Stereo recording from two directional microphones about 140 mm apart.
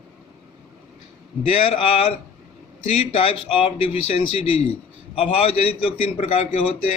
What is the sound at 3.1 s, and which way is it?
A man's voice, 40° left (ahead or behind).